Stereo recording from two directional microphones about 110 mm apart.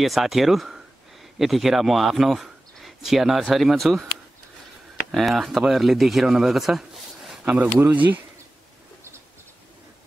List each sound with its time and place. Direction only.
0.0 s speech: centre (ahead or behind)
5.1 s speech: centre (ahead or behind)
7.4 s speech: 15° right (ahead or behind)